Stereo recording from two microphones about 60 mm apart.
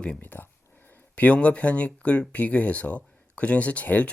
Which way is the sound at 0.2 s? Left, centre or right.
Left.